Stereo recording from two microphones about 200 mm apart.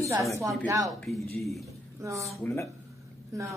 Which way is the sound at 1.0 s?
Centre (ahead or behind).